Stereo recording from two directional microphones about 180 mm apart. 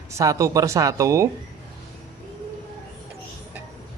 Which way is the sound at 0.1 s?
15° right (ahead or behind).